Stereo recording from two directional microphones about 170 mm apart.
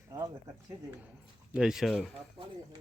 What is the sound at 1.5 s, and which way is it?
Speech, 5° right (ahead or behind).